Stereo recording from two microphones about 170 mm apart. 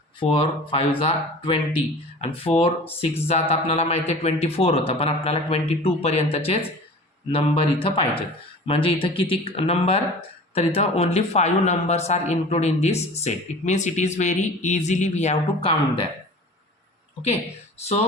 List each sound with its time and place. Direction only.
0.2 s speech: 30° left (ahead or behind)